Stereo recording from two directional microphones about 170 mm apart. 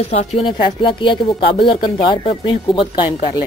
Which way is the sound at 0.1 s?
35° left (ahead or behind).